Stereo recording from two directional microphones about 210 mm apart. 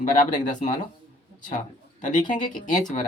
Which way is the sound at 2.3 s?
40° left (ahead or behind).